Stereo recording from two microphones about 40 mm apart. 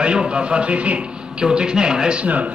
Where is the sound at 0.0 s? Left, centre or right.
Right.